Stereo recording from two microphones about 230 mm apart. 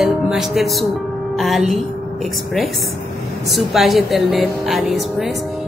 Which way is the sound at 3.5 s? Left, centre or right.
Centre.